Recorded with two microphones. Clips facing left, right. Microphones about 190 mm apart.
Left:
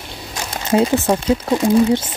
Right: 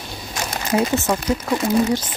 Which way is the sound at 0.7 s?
30° left (ahead or behind).